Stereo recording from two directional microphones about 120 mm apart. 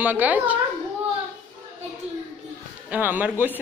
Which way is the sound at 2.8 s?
15° right (ahead or behind).